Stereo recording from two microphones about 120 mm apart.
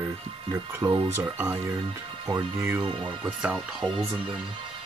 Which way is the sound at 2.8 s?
45° right (ahead or behind).